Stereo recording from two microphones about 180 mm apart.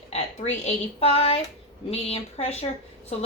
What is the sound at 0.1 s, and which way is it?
A woman's voice, 40° left (ahead or behind).